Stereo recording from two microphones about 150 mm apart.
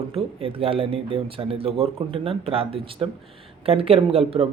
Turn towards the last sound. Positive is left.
turn(degrees=-40)  # may be behind; listen again after turning